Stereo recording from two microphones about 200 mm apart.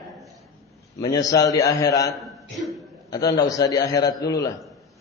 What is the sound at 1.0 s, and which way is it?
A man's voice, 20° left (ahead or behind).